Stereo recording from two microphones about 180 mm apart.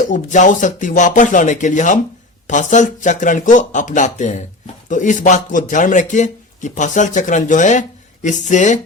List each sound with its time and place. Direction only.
0.0 s speech: 45° left (ahead or behind)